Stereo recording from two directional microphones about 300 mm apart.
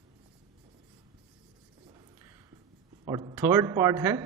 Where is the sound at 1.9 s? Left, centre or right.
Centre.